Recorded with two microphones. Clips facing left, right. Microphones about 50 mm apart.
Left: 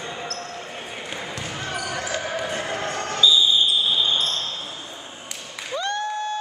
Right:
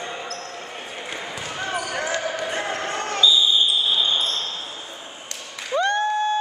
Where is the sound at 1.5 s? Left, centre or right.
Centre.